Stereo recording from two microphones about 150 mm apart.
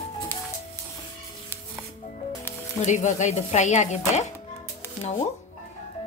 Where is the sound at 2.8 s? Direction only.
55° left (ahead or behind).